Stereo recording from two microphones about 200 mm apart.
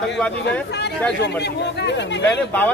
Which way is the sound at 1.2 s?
60° left (ahead or behind).